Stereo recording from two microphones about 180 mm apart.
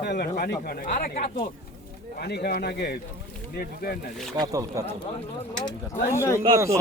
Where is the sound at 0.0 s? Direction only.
60° left (ahead or behind).